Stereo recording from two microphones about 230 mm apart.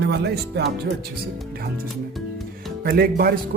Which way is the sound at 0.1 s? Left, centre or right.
Right.